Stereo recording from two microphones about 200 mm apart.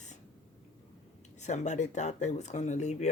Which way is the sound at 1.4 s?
35° left (ahead or behind).